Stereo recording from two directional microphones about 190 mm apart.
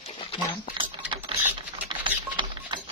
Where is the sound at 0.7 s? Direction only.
25° right (ahead or behind).